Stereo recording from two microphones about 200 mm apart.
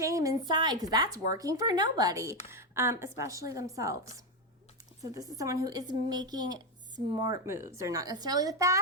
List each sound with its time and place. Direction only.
0.0 s speech: 15° right (ahead or behind)
5.1 s speech: 15° right (ahead or behind)